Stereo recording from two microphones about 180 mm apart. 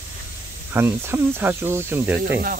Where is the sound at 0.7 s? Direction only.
15° right (ahead or behind).